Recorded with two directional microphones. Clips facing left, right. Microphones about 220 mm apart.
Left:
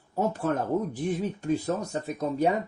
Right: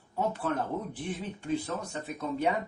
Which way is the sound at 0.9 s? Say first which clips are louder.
Left 7 dB; 40° left (ahead or behind).